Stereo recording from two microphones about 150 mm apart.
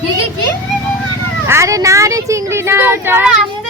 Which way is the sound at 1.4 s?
20° right (ahead or behind).